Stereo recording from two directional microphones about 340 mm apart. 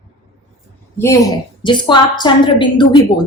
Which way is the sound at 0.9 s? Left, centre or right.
Centre.